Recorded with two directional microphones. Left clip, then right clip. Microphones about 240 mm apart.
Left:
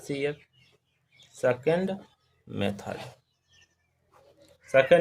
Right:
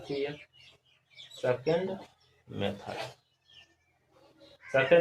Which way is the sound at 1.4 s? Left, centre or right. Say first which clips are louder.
Left 4 dB; left.